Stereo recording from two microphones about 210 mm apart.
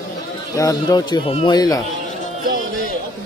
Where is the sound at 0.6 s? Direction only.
15° left (ahead or behind).